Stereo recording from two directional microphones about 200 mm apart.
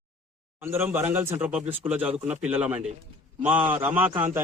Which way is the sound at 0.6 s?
10° right (ahead or behind).